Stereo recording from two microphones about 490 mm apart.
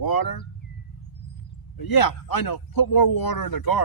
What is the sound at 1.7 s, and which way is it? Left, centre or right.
Speech, left.